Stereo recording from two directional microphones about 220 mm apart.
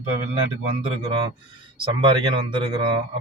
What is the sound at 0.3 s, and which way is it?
A man's voice, 25° right (ahead or behind).